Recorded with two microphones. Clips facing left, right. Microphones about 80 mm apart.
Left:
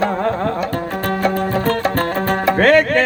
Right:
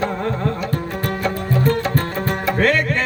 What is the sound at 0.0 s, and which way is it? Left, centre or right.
Music, left.